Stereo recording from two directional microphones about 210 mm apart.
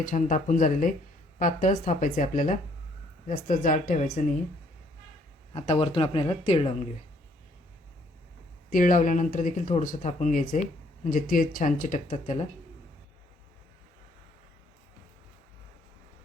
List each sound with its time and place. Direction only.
0.0 s speech: 40° left (ahead or behind)
5.5 s speech: 25° left (ahead or behind)
8.7 s speech: 40° left (ahead or behind)